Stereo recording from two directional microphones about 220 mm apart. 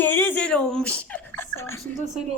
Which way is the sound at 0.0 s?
10° left (ahead or behind).